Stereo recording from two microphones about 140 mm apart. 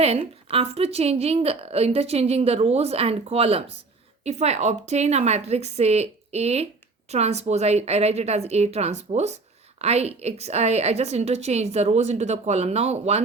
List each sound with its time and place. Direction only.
0.0 s a woman's voice: 45° right (ahead or behind)